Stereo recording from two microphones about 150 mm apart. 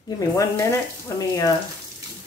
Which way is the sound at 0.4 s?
20° left (ahead or behind).